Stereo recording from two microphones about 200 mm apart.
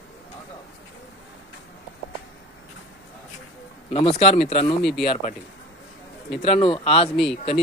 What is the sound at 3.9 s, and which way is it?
Speech, 30° left (ahead or behind).